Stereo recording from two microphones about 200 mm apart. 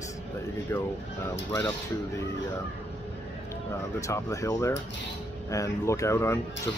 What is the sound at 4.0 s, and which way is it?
Speech, 15° left (ahead or behind).